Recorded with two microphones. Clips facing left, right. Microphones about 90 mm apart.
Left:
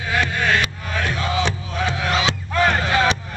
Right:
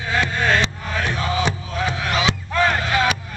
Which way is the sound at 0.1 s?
20° right (ahead or behind).